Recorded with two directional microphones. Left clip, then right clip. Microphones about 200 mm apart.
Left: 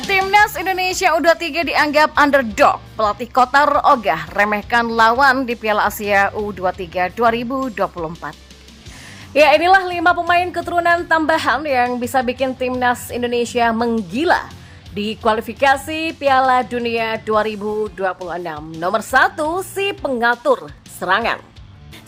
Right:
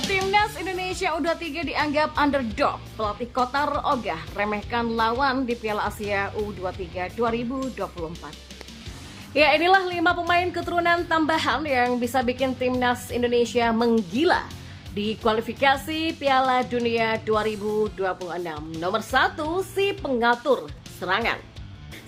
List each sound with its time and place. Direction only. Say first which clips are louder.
0.1 s a woman's voice: left 9 dB; 20° left (ahead or behind)
9.3 s a woman's voice: left 7 dB; 25° left (ahead or behind)